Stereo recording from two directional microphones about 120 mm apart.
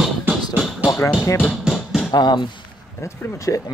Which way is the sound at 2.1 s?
35° left (ahead or behind).